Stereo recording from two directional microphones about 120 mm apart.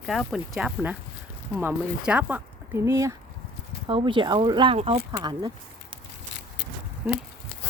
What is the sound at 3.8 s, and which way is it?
Speech, 45° right (ahead or behind).